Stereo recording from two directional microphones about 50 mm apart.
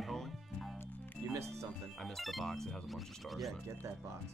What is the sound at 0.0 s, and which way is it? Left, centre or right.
Music, centre.